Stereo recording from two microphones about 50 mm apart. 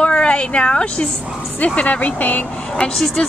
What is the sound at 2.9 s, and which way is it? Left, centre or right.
Speech, centre.